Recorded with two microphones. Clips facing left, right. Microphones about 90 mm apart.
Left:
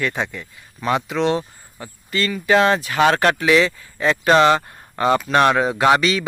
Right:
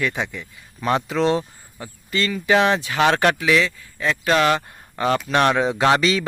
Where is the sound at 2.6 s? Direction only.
20° right (ahead or behind).